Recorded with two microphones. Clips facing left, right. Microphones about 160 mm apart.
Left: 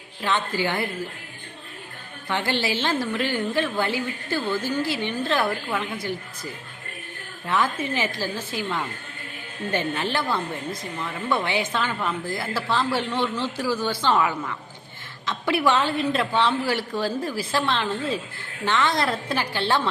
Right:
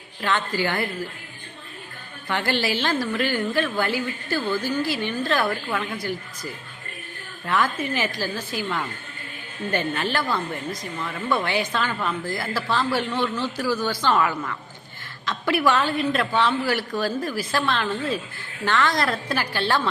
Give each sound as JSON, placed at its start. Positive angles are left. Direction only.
{"t": 0.2, "sound": "speech", "side_deg": 20}
{"t": 2.3, "sound": "speech", "side_deg": 20}